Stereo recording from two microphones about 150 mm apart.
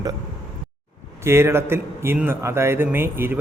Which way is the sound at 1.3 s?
15° right (ahead or behind).